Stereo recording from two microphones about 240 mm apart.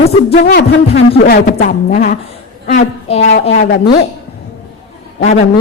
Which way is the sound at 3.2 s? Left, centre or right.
Left.